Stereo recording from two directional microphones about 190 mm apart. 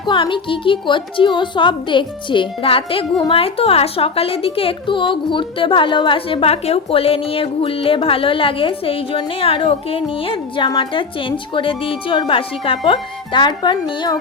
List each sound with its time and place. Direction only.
0.0 s a woman's voice: 25° left (ahead or behind)